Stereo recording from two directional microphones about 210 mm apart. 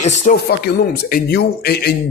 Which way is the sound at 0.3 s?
50° left (ahead or behind).